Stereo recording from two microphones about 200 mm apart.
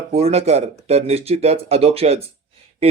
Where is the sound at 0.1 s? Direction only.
30° right (ahead or behind).